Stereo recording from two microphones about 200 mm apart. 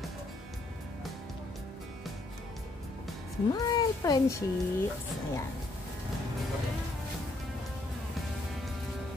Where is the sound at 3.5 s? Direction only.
20° left (ahead or behind).